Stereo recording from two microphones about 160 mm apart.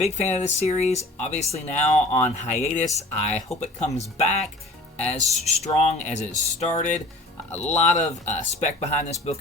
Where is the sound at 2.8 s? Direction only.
45° left (ahead or behind).